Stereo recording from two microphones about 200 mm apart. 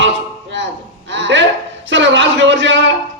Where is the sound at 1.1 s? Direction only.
65° right (ahead or behind).